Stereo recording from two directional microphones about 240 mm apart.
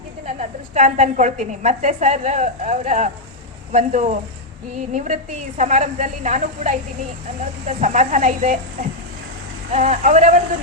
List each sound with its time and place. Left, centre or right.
0.3 s a woman's voice: right
9.7 s a woman's voice: right